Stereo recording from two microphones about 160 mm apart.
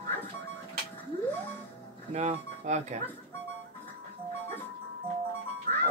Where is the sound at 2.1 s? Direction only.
45° right (ahead or behind).